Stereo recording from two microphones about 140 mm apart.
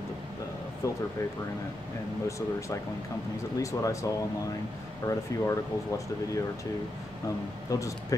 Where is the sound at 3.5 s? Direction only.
20° left (ahead or behind).